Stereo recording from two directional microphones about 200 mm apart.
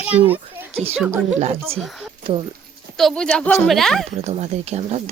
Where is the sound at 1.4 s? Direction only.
30° right (ahead or behind).